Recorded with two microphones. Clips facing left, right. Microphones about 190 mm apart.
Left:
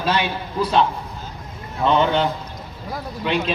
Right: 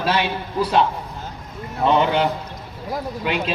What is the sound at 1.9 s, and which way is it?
A man's voice, 10° right (ahead or behind).